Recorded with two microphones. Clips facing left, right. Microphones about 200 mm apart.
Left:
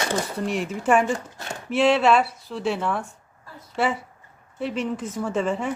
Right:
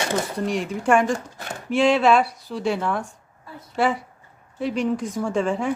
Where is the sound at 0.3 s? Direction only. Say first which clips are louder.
Right 1 dB; centre (ahead or behind).